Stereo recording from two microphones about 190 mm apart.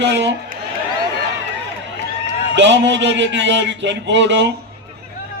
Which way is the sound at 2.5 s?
70° right (ahead or behind).